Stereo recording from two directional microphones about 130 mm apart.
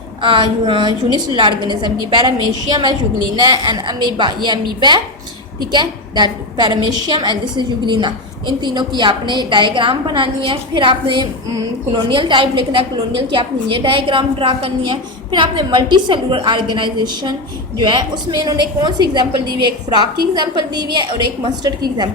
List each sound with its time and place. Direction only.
0.2 s a woman's voice: 40° right (ahead or behind)
3.5 s a woman's voice: 35° right (ahead or behind)